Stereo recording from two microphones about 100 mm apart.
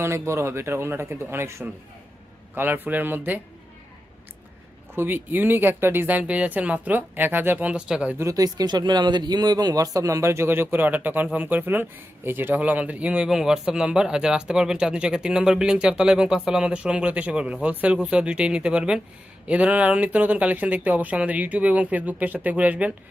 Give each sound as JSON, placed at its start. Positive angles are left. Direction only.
{"t": 0.0, "sound": "speech", "side_deg": -25}
{"t": 4.9, "sound": "speech", "side_deg": -20}
{"t": 8.2, "sound": "speech", "side_deg": -35}